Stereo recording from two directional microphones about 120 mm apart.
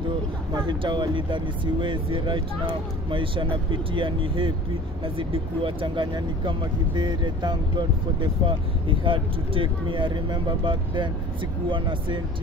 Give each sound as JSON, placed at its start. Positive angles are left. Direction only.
{"t": 0.6, "sound": "speech", "side_deg": -40}